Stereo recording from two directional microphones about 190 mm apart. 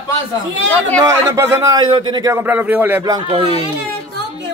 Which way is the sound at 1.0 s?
15° right (ahead or behind).